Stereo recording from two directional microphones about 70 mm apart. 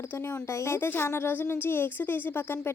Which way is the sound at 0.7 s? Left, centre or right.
Left.